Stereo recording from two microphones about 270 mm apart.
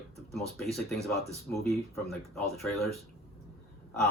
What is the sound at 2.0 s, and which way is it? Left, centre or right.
Speech, centre.